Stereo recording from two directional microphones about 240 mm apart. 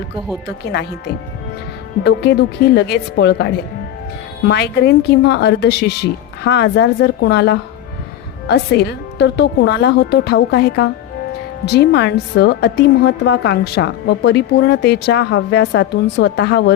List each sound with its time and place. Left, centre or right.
2.0 s a woman's voice: left